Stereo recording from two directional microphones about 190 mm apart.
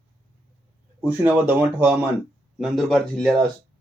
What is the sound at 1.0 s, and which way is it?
Speech, 10° right (ahead or behind).